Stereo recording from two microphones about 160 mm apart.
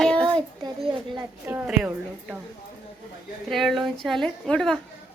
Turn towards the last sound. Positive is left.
turn(degrees=5)  # may be behind; listen again after turning